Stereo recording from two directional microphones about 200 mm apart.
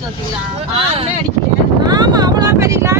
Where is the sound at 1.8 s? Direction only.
20° right (ahead or behind).